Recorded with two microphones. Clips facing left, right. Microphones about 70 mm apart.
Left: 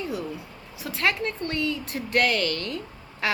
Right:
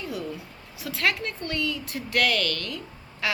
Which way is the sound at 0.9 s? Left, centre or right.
Left.